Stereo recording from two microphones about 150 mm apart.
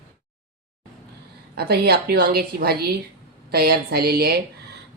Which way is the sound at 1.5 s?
90° right.